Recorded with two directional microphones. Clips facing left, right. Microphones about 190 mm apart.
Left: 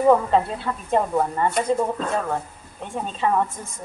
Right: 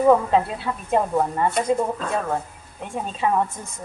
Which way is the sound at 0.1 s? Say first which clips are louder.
Even; 5° right (ahead or behind).